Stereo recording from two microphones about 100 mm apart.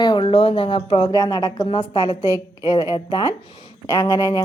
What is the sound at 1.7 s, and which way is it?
Speech, 60° left (ahead or behind).